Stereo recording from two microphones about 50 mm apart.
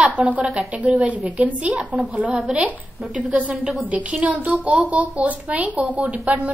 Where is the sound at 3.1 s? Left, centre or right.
Right.